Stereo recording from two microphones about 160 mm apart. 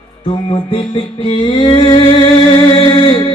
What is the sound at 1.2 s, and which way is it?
Music, 35° left (ahead or behind).